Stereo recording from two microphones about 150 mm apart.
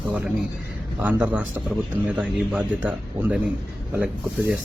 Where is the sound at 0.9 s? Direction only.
10° right (ahead or behind).